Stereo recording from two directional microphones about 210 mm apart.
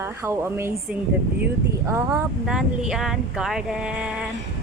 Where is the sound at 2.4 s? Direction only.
5° right (ahead or behind).